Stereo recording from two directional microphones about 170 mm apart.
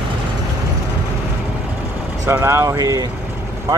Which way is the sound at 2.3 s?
15° right (ahead or behind).